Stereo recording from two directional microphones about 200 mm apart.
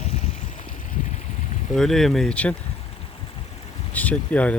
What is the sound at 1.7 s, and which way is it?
Speech, centre (ahead or behind).